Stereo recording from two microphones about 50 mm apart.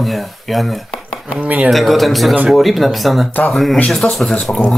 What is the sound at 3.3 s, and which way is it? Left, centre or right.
Speech, left.